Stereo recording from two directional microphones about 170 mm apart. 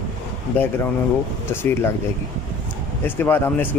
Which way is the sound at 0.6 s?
10° left (ahead or behind).